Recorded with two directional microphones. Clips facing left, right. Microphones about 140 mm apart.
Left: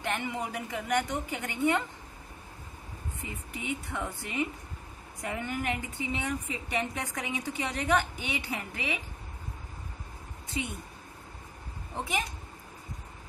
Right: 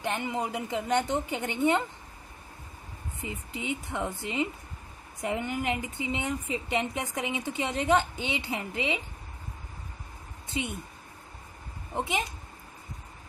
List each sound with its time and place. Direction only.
0.0 s a woman's voice: 20° right (ahead or behind)
3.5 s a woman's voice: 20° right (ahead or behind)
10.5 s speech: 20° right (ahead or behind)
11.9 s a woman's voice: 25° right (ahead or behind)